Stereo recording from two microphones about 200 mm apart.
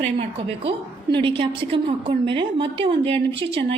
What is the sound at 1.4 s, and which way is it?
A woman's voice, 25° right (ahead or behind).